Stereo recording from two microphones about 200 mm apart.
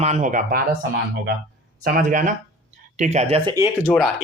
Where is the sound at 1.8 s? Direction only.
45° right (ahead or behind); by 3.6 s 25° right (ahead or behind).